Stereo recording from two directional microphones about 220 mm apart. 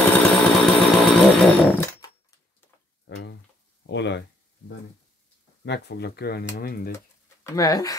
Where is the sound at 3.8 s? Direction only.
50° left (ahead or behind).